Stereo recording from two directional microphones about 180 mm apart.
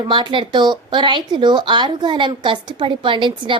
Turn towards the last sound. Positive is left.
turn(degrees=-25)  # may be behind; listen again after turning